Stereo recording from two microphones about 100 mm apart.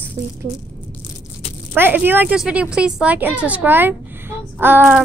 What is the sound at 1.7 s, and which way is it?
A woman's voice, 20° right (ahead or behind).